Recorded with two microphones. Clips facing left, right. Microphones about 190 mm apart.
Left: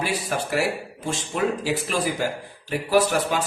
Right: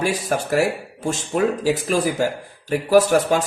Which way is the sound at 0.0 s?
45° right (ahead or behind).